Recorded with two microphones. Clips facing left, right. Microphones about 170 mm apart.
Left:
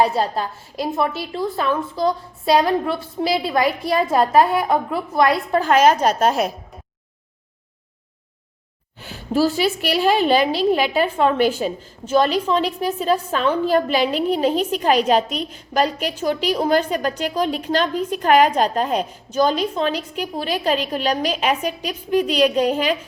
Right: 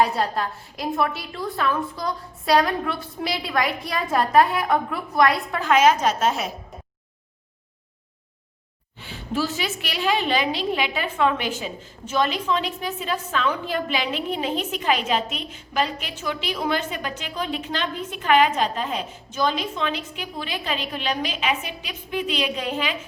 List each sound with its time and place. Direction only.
0.0 s a woman's voice: 30° left (ahead or behind)
9.0 s a woman's voice: 40° left (ahead or behind)